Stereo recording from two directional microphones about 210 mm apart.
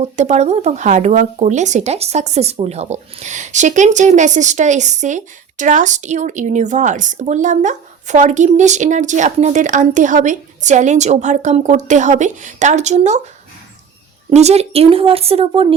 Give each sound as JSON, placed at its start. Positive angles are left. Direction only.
{"t": 0.0, "sound": "speech", "side_deg": -35}
{"t": 14.3, "sound": "speech", "side_deg": -30}